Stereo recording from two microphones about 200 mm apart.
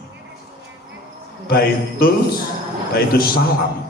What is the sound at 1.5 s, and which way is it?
A man's voice, 50° left (ahead or behind).